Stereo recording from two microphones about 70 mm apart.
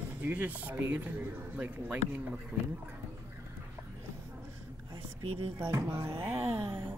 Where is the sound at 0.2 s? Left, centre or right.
Right.